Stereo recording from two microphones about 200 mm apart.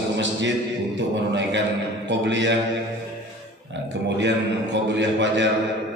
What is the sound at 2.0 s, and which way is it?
Speech, 60° right (ahead or behind).